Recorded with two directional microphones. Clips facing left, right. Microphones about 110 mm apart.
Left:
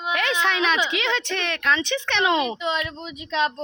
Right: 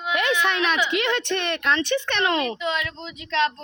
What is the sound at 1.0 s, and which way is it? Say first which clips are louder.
Speech: right 2 dB; 10° right (ahead or behind).